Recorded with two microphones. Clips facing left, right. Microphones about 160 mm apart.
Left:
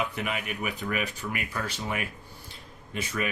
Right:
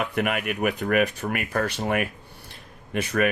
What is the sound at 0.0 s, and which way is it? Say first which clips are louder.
Speech: right 6 dB; 60° right (ahead or behind).